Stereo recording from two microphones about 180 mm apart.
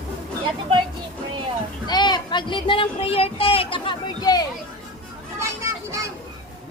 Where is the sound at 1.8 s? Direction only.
25° left (ahead or behind).